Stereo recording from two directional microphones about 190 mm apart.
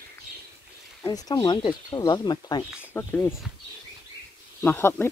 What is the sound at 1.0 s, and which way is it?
Speech, 20° left (ahead or behind).